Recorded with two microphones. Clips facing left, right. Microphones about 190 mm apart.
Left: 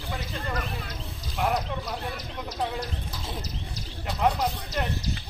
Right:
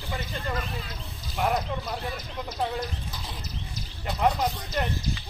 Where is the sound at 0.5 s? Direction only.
60° left (ahead or behind).